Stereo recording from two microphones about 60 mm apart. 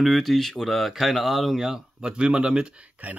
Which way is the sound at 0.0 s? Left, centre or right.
Centre.